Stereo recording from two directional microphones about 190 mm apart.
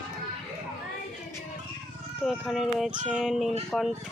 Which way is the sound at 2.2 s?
Centre (ahead or behind).